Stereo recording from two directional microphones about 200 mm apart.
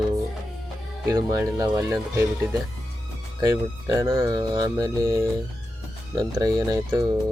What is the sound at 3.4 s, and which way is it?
Speech, 15° right (ahead or behind).